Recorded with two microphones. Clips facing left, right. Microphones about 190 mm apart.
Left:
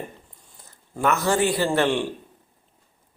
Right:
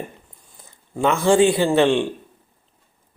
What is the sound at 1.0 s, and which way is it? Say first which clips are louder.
Speech: right 6 dB; 30° right (ahead or behind).